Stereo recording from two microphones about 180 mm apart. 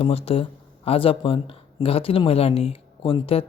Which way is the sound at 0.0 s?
35° left (ahead or behind).